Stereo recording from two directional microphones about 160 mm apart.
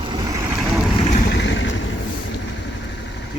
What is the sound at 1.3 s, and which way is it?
Vehicle, 90° left.